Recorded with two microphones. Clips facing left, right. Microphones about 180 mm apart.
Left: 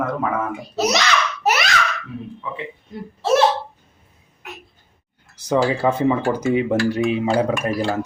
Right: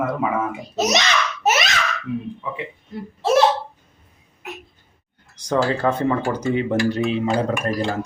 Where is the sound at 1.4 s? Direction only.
20° right (ahead or behind).